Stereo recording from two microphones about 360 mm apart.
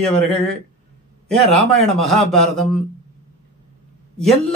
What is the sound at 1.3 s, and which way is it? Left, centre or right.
Speech, centre.